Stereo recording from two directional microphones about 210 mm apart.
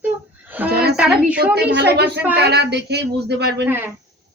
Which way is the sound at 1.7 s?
55° right (ahead or behind).